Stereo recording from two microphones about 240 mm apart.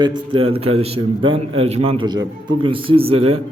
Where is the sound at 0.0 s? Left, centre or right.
Centre.